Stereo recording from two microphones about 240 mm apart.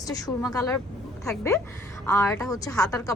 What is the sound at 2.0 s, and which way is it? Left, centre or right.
A woman's voice, centre.